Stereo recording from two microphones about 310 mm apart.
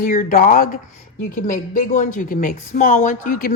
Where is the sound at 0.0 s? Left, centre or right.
Left.